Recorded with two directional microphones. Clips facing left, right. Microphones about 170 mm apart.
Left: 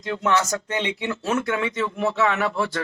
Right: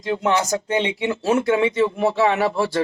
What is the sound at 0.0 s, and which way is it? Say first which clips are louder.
Speech: right 2 dB; 20° right (ahead or behind).